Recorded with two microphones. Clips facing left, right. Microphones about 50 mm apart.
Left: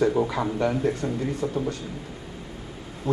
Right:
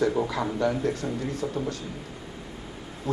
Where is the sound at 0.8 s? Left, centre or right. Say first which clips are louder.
Left 3 dB; left.